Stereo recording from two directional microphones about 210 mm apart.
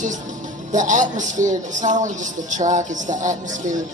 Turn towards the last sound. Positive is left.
turn(degrees=-35)  # may be behind; listen again after turning